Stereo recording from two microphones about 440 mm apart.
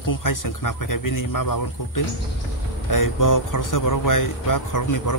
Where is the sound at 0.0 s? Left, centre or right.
Left.